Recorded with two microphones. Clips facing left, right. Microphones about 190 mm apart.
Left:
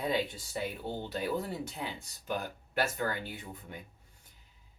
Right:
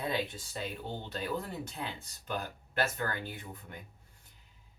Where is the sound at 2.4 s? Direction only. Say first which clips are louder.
Right 1 dB; 15° left (ahead or behind).